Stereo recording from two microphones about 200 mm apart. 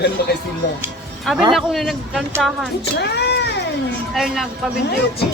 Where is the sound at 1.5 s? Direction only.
Centre (ahead or behind).